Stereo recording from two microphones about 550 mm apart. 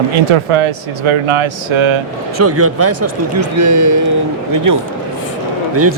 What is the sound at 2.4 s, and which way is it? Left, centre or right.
Speech, right.